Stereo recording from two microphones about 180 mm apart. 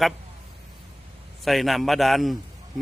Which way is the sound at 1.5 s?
Centre (ahead or behind).